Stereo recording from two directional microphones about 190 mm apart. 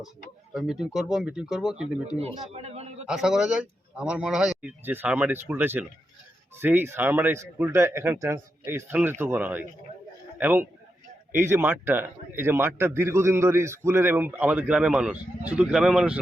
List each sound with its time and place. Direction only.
0.5 s speech: 5° right (ahead or behind)
2.1 s a man's voice: 35° right (ahead or behind)
2.5 s a sound: 35° right (ahead or behind)
3.1 s a man's voice: 5° right (ahead or behind)